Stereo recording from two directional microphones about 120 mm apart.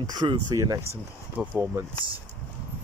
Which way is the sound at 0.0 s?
35° right (ahead or behind).